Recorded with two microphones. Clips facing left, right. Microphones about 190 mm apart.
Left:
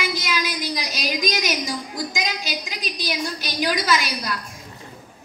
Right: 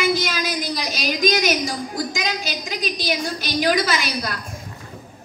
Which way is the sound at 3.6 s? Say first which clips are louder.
Right 1 dB; 50° right (ahead or behind).